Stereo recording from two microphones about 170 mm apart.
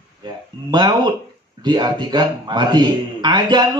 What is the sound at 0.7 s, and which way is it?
Speech, 25° right (ahead or behind).